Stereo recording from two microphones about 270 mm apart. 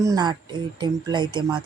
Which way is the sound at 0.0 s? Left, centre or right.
Centre.